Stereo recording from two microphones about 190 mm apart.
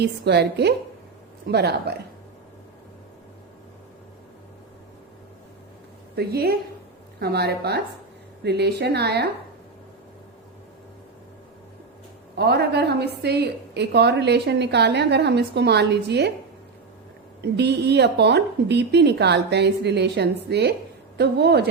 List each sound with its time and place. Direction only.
0.0 s a woman's voice: 60° right (ahead or behind)
6.1 s a woman's voice: 55° right (ahead or behind)
12.4 s a woman's voice: 60° right (ahead or behind)
17.4 s a woman's voice: 60° right (ahead or behind)